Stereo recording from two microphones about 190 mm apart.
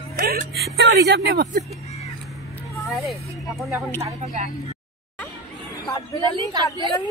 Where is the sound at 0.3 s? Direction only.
55° right (ahead or behind).